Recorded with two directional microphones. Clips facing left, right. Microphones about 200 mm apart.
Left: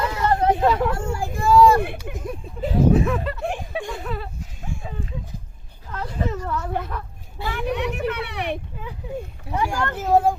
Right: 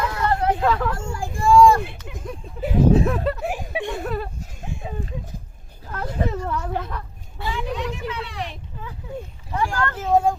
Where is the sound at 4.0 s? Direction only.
45° right (ahead or behind).